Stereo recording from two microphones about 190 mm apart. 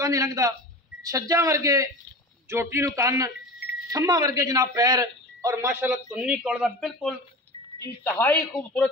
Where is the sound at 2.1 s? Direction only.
55° left (ahead or behind).